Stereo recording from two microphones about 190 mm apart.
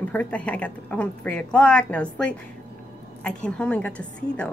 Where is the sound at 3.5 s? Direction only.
5° left (ahead or behind).